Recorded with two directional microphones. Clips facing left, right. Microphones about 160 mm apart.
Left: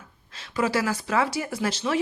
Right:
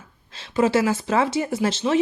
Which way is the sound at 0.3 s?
25° right (ahead or behind).